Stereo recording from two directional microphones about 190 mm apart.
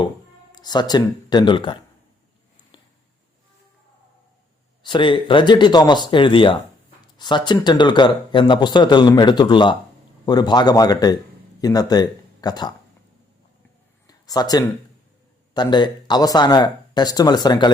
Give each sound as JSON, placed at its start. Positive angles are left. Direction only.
{"t": 0.5, "sound": "speech", "side_deg": 20}
{"t": 4.8, "sound": "speech", "side_deg": 25}
{"t": 14.1, "sound": "speech", "side_deg": 20}